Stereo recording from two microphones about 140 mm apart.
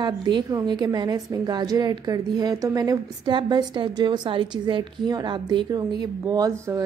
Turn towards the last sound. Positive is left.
turn(degrees=-20)  # may be behind; listen again after turning